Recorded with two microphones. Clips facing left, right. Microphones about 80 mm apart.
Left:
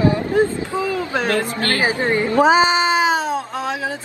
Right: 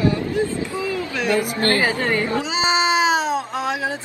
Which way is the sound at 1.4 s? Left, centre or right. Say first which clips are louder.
Right 1 dB; right.